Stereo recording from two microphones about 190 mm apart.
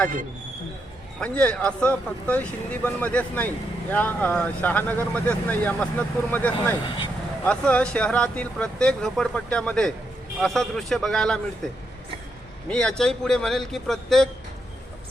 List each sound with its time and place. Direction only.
1.2 s speech: 5° left (ahead or behind)
6.8 s speech: 25° left (ahead or behind)
7.4 s speech: 5° left (ahead or behind)
12.6 s speech: 5° left (ahead or behind)